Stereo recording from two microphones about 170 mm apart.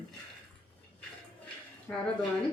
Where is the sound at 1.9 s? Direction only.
10° left (ahead or behind).